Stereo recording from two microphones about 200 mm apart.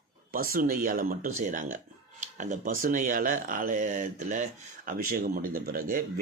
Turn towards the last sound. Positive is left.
turn(degrees=-45)  # may be behind; listen again after turning